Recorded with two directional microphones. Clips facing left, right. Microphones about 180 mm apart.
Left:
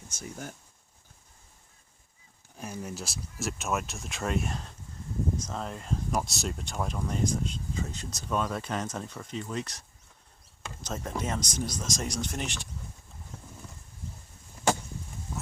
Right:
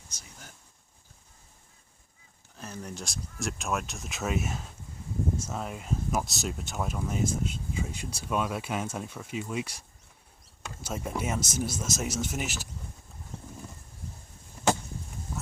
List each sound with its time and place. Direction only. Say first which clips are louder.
0.1 s speech: left 13 dB; 50° left (ahead or behind)
2.6 s speech: left 2 dB; 10° left (ahead or behind); by 12.6 s 5° right (ahead or behind)